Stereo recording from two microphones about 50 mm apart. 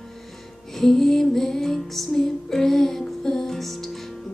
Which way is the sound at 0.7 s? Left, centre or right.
Centre.